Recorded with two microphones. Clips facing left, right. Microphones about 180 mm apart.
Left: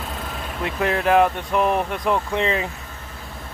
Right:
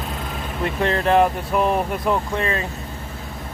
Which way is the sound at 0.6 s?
5° left (ahead or behind).